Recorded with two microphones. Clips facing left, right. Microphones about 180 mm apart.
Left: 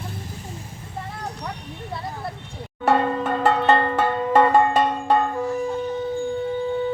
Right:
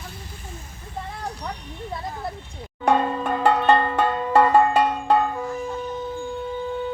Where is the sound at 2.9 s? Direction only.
Centre (ahead or behind).